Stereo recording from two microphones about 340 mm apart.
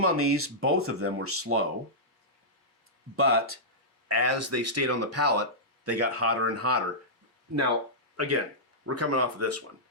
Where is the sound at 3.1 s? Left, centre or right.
Right.